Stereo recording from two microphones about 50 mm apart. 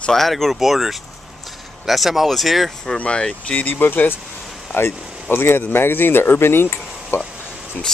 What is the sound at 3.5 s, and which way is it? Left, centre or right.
Speech, left.